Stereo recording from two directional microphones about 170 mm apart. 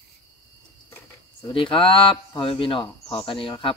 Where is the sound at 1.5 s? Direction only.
30° left (ahead or behind).